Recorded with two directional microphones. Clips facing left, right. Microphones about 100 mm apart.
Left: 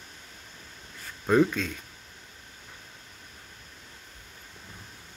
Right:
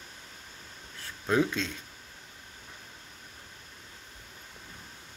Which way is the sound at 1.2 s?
5° left (ahead or behind).